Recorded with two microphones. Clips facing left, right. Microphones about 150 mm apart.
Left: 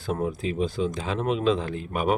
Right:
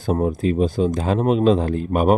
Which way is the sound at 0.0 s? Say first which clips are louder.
Right 7 dB; 40° right (ahead or behind).